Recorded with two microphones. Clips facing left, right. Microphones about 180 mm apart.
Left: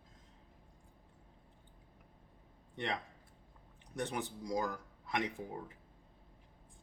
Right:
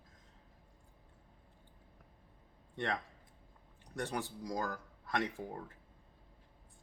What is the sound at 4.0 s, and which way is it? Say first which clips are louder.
Speech: even; 20° left (ahead or behind).